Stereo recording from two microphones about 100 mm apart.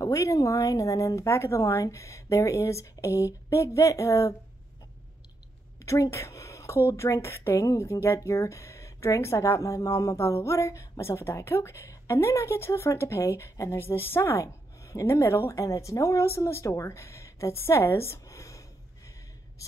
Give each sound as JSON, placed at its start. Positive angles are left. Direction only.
{"t": 0.0, "sound": "speech", "side_deg": 30}
{"t": 5.8, "sound": "a woman's voice", "side_deg": 30}